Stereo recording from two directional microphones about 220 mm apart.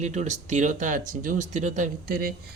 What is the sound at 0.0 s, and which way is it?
Speech, 30° right (ahead or behind).